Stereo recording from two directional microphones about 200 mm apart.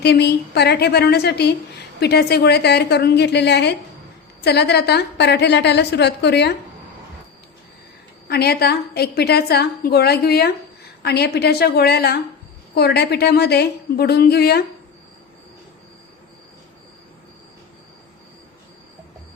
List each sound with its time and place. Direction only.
0.0 s a woman's voice: 55° left (ahead or behind)
8.3 s a woman's voice: 50° left (ahead or behind)